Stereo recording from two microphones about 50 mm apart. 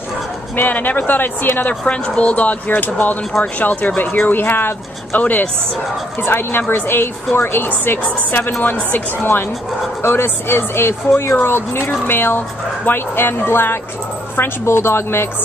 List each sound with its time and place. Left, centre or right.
0.6 s speech: left
1.9 s speech: left
5.2 s speech: left
6.2 s a woman's voice: left